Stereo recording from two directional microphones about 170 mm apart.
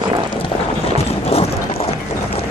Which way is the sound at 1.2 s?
35° left (ahead or behind).